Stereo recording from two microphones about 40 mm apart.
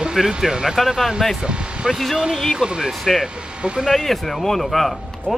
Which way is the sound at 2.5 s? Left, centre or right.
Right.